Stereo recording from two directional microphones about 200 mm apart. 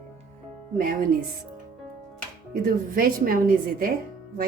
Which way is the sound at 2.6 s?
45° right (ahead or behind).